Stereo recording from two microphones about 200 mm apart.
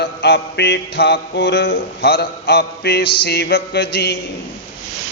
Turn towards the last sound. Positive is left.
turn(degrees=55)  # may be behind; listen again after turning